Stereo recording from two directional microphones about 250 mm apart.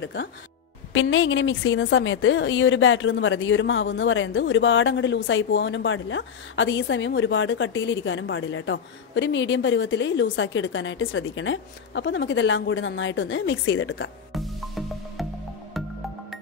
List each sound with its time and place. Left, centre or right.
0.0 s a woman's voice: left
14.3 s music: centre